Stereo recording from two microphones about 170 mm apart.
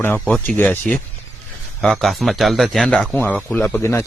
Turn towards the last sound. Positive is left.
turn(degrees=15)  # may be behind; listen again after turning